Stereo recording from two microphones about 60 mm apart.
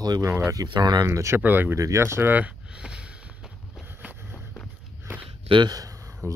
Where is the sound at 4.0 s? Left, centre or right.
Right.